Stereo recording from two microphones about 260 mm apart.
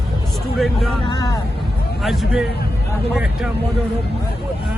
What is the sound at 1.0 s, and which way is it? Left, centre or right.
Speech, centre.